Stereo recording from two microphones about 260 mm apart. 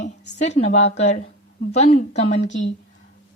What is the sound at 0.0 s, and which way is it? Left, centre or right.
A woman's voice, left.